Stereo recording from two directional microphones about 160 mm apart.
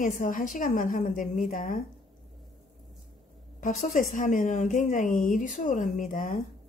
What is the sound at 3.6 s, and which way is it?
A woman's voice, 55° left (ahead or behind).